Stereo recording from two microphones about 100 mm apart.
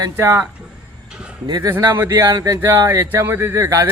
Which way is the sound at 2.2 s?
35° right (ahead or behind).